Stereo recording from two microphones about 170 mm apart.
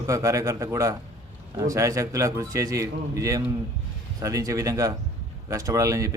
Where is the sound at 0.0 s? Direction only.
20° right (ahead or behind).